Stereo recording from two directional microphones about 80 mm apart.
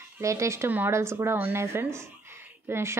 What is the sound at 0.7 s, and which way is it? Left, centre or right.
Speech, right.